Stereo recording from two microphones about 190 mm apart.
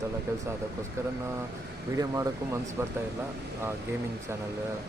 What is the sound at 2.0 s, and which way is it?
Speech, 20° right (ahead or behind).